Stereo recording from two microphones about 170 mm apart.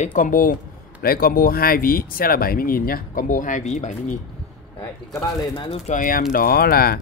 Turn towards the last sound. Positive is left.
turn(degrees=60)  # may be behind; listen again after turning